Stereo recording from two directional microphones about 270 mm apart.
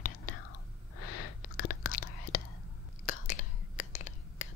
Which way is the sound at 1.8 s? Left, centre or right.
Left.